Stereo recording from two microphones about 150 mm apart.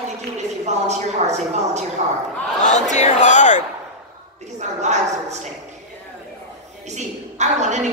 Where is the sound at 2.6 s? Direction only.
50° left (ahead or behind).